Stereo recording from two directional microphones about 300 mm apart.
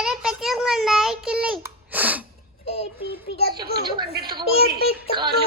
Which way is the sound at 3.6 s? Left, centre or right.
Right.